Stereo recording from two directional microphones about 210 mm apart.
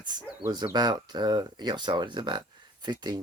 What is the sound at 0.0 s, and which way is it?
Speech, 20° right (ahead or behind).